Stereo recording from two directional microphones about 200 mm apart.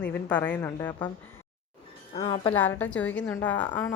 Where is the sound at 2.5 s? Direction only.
10° left (ahead or behind).